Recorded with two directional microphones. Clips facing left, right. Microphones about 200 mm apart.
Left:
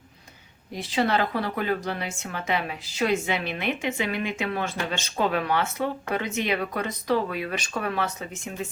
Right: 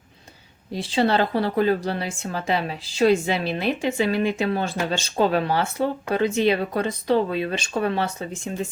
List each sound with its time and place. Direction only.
0.7 s a woman's voice: 30° right (ahead or behind)